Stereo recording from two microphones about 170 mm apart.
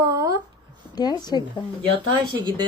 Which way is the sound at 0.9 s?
25° left (ahead or behind).